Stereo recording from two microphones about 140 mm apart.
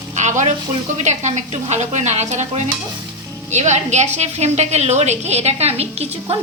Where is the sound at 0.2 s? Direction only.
60° right (ahead or behind).